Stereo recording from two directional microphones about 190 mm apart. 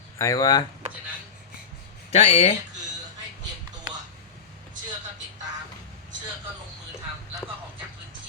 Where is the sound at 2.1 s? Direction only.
35° left (ahead or behind).